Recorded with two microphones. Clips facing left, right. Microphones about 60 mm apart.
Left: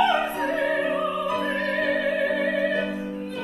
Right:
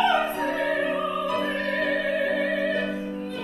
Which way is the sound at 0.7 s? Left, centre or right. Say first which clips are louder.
Left 1 dB; centre.